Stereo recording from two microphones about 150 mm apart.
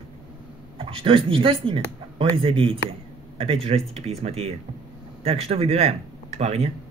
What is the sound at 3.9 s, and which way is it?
Speech, 45° right (ahead or behind).